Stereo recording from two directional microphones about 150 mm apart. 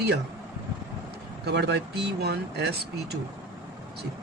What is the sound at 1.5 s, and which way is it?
Speech, 90° right.